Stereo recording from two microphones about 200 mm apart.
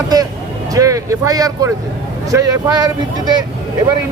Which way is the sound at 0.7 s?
15° right (ahead or behind).